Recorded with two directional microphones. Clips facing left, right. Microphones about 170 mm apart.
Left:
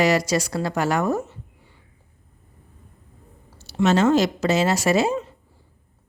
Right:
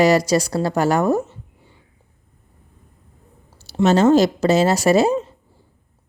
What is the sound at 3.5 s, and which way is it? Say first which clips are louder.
Speech: right 3 dB; 35° right (ahead or behind).